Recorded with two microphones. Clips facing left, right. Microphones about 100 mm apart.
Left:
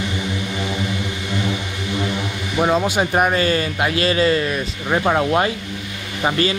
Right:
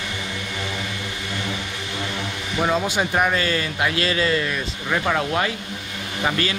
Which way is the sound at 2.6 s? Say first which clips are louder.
Left 4 dB; 20° left (ahead or behind).